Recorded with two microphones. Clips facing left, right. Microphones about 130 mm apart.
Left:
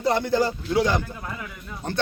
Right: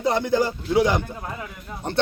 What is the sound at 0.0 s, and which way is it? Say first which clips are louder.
A man's voice: right 1 dB; 20° right (ahead or behind).